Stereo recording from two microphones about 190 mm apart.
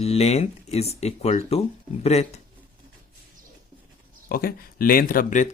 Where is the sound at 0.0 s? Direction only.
35° left (ahead or behind).